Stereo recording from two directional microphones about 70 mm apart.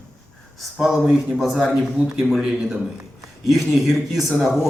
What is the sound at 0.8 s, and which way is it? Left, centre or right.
Speech, centre.